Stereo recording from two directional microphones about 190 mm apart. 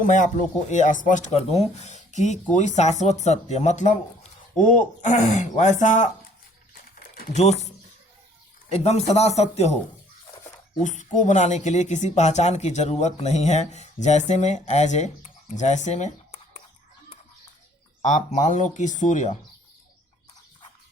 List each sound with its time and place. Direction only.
0.0 s speech: 45° left (ahead or behind)
7.3 s speech: 35° left (ahead or behind)
8.7 s speech: 35° left (ahead or behind)
10.8 s speech: 40° left (ahead or behind)
18.0 s speech: 40° left (ahead or behind)